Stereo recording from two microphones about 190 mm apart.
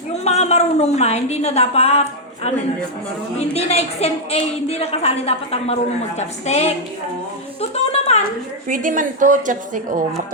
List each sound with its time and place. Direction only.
0.1 s a woman's voice: 35° left (ahead or behind)
8.6 s a woman's voice: 45° right (ahead or behind)